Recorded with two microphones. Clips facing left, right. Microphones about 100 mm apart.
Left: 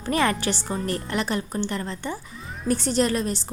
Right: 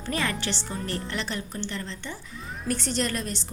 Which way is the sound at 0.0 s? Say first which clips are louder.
Left 6 dB; 45° left (ahead or behind).